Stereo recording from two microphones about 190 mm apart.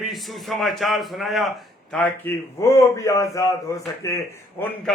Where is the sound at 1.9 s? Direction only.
10° left (ahead or behind).